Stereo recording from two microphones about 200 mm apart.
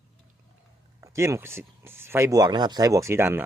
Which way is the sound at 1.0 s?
15° right (ahead or behind).